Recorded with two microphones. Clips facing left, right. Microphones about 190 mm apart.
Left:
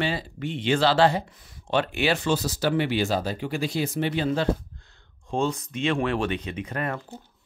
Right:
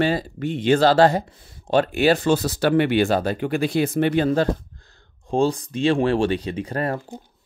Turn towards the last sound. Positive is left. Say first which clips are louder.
# right 5 dB
turn(degrees=-35)  # may be behind; listen again after turning